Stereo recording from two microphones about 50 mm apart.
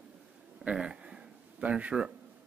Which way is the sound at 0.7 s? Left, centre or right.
Right.